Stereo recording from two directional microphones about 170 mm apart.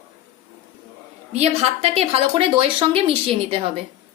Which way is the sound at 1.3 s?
40° right (ahead or behind).